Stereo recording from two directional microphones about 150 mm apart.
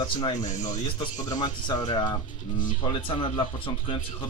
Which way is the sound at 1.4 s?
30° left (ahead or behind).